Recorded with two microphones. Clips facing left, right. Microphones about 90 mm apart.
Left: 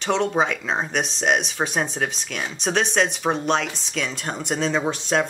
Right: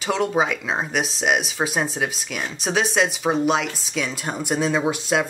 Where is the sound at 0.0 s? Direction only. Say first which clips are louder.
Even; 5° right (ahead or behind).